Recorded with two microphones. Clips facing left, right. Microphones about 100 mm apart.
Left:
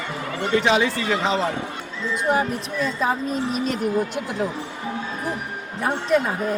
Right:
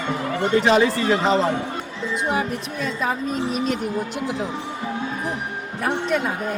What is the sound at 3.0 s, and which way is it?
Speech, 35° left (ahead or behind).